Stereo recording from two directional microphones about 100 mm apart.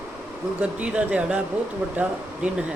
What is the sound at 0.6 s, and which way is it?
Speech, 15° right (ahead or behind).